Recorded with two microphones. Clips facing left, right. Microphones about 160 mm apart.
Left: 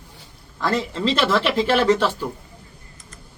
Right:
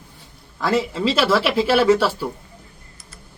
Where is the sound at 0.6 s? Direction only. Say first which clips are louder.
Right 2 dB; 5° right (ahead or behind).